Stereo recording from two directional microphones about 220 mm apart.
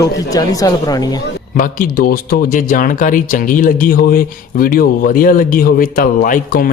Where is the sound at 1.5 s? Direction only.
40° left (ahead or behind).